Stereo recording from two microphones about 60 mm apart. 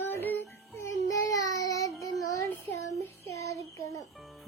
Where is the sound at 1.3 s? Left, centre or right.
Left.